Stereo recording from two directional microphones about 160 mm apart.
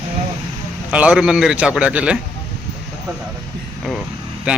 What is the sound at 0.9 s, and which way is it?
A man's voice, 5° right (ahead or behind).